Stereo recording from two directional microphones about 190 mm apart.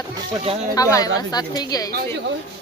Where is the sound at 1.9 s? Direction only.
60° right (ahead or behind).